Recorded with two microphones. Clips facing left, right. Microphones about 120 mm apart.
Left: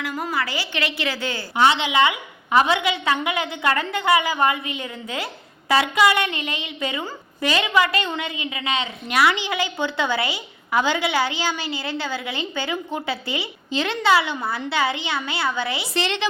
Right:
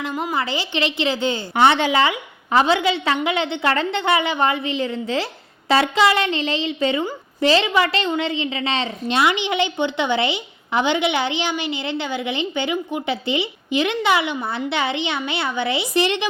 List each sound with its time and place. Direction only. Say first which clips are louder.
0.0 s a woman's voice: right 2 dB; 20° right (ahead or behind)
1.5 s a woman's voice: right 2 dB; 55° right (ahead or behind)
1.9 s a woman's voice: right 1 dB; 35° right (ahead or behind); by 16.2 s 15° right (ahead or behind)